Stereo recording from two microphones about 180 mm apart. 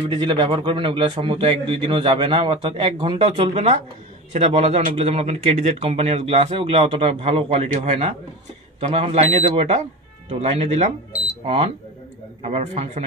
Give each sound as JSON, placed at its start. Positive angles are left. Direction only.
{"t": 0.0, "sound": "a man's voice", "side_deg": -30}